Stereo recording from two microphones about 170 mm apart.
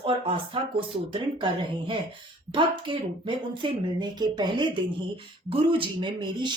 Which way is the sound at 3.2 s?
30° right (ahead or behind).